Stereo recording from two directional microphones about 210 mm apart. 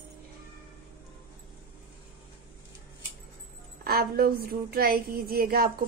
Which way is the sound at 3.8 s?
45° right (ahead or behind).